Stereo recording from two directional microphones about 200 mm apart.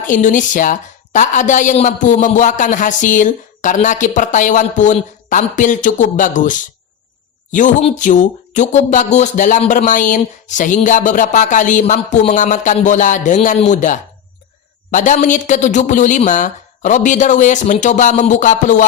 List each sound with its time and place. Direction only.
0.1 s a woman's voice: 40° left (ahead or behind)